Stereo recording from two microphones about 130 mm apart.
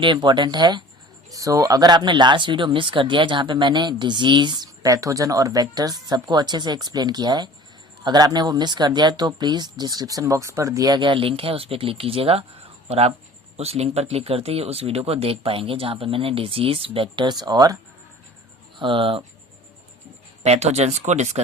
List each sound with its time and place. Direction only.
0.0 s speech: 35° right (ahead or behind)
18.8 s speech: 40° right (ahead or behind)
20.4 s speech: 55° right (ahead or behind)